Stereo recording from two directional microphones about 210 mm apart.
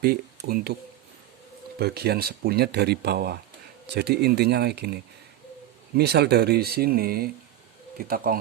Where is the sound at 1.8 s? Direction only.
50° right (ahead or behind).